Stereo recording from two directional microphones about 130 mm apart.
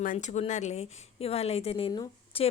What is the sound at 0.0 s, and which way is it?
A woman's voice, 80° left.